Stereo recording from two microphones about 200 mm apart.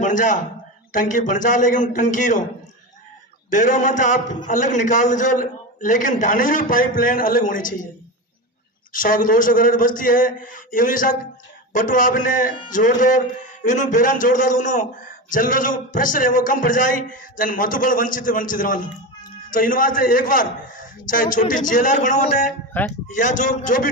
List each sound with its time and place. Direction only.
0.0 s a man's voice: 40° left (ahead or behind)
3.5 s a man's voice: 40° left (ahead or behind)
8.9 s a man's voice: 45° left (ahead or behind)